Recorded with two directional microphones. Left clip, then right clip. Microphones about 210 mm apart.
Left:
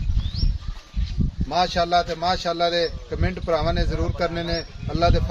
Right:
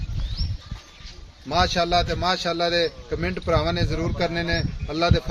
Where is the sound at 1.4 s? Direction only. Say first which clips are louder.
Even; 30° right (ahead or behind).